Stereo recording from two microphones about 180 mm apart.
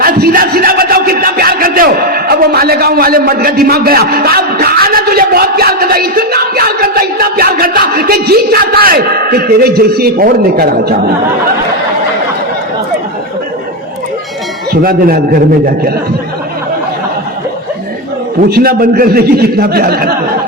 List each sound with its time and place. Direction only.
0.0 s music: 55° right (ahead or behind)
14.7 s speech: 55° right (ahead or behind)
18.4 s speech: 55° right (ahead or behind)